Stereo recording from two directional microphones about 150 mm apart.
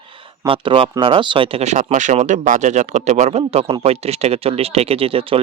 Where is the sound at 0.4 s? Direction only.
35° right (ahead or behind).